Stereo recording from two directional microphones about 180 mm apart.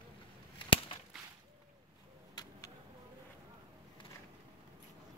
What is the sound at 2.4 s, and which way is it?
Vehicle, 20° left (ahead or behind).